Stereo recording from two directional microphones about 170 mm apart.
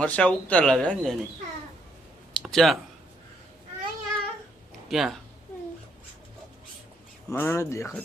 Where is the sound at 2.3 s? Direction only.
Centre (ahead or behind).